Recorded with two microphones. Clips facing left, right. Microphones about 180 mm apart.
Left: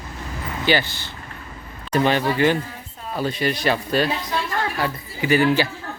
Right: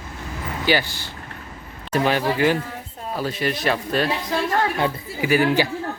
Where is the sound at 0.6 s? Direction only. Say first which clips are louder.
Even; 10° right (ahead or behind).